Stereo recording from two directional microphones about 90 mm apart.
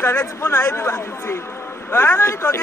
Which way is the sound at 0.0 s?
25° left (ahead or behind).